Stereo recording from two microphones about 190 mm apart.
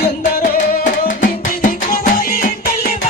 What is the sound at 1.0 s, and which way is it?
Music, 45° left (ahead or behind).